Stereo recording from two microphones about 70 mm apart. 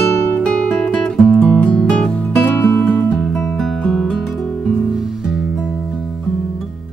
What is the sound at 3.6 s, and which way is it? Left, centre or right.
Music, centre.